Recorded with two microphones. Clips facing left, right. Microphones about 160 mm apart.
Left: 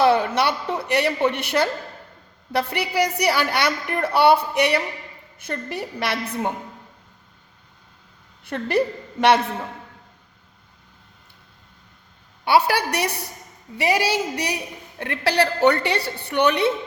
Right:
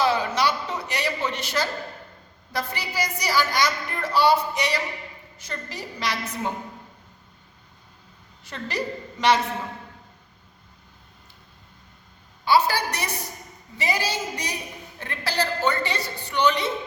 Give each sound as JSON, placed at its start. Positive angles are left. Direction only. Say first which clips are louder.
{"t": 0.0, "sound": "a woman's voice", "louder": "left 4 dB", "side_deg": 60}
{"t": 8.4, "sound": "a woman's voice", "louder": "left 8 dB", "side_deg": 55}
{"t": 12.5, "sound": "a woman's voice", "louder": "left 2 dB", "side_deg": 65}